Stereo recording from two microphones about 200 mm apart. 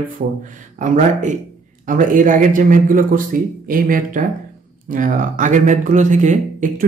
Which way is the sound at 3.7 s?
45° right (ahead or behind).